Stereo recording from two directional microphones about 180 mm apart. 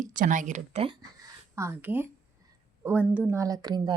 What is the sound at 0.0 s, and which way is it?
Speech, 45° right (ahead or behind).